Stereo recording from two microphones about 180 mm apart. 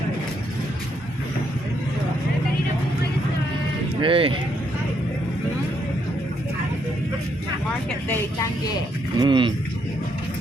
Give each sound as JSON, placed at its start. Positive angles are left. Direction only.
{"t": 4.0, "sound": "speech", "side_deg": -30}
{"t": 9.1, "sound": "speech", "side_deg": -25}